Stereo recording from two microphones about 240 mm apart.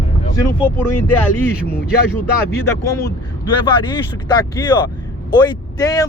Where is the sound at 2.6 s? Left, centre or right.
Centre.